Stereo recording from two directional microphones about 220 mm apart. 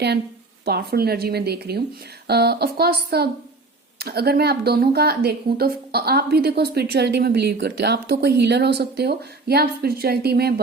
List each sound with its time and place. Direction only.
0.6 s a woman's voice: 45° right (ahead or behind)